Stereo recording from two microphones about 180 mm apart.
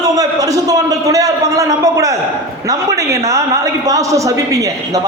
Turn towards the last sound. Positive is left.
turn(degrees=-20)  # may be behind; listen again after turning